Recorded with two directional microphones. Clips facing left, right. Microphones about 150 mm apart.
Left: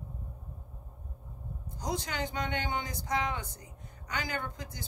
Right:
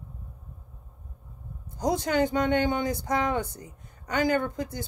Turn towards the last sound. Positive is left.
turn(degrees=-50)  # may be behind; listen again after turning